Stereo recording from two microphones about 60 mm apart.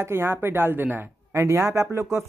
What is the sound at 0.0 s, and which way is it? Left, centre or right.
Speech, right.